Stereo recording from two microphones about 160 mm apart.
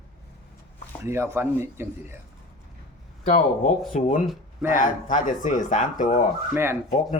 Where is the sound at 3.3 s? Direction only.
55° left (ahead or behind).